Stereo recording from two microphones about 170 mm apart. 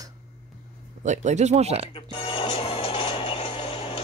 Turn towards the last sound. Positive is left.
turn(degrees=30)  # may be behind; listen again after turning